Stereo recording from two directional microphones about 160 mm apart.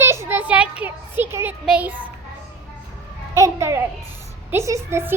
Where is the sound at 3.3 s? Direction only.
15° right (ahead or behind).